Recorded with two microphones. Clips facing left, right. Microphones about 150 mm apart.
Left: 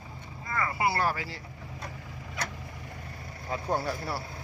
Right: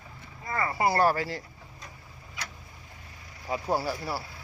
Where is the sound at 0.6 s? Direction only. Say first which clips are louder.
Right 3 dB; 40° right (ahead or behind).